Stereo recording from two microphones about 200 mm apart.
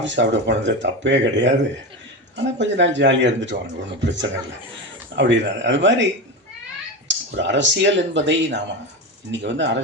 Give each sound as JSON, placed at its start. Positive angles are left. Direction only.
{"t": 0.0, "sound": "speech", "side_deg": -65}
{"t": 7.1, "sound": "speech", "side_deg": -65}